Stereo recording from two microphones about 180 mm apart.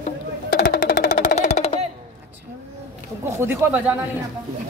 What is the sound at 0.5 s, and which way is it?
Music, 55° left (ahead or behind).